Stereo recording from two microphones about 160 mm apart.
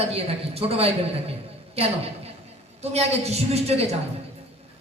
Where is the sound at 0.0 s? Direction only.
40° right (ahead or behind).